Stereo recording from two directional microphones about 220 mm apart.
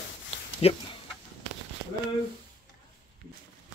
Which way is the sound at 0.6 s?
30° left (ahead or behind).